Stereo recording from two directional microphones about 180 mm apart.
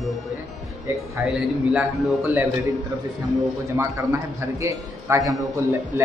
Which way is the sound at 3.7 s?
15° right (ahead or behind).